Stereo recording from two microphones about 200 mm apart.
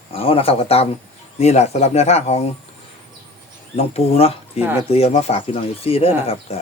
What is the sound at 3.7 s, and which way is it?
Speech, 30° left (ahead or behind).